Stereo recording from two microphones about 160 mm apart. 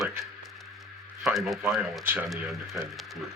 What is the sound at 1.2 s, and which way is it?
Speech, centre (ahead or behind).